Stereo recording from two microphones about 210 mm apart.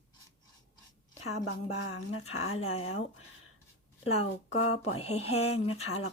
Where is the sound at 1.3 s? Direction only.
85° left.